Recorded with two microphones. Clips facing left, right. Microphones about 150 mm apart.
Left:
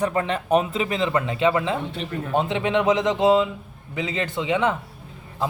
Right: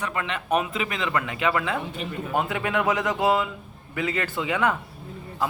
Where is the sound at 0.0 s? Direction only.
35° left (ahead or behind).